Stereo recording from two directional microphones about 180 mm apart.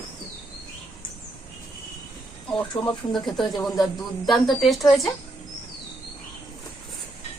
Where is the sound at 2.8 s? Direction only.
30° left (ahead or behind).